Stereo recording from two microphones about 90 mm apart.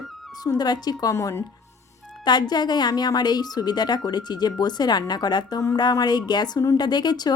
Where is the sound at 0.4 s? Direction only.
50° left (ahead or behind).